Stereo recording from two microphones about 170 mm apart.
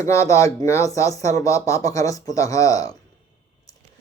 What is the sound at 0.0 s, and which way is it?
Speech, 20° left (ahead or behind).